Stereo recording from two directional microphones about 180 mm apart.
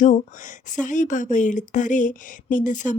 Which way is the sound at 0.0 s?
45° left (ahead or behind).